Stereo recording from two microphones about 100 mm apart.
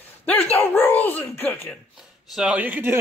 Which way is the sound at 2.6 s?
20° right (ahead or behind).